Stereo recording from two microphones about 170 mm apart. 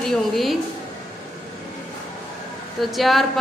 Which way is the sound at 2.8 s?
Centre (ahead or behind).